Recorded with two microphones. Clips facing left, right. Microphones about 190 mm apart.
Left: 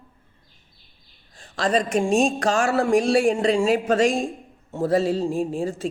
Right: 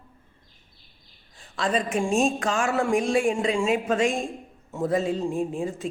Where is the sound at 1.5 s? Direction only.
80° left.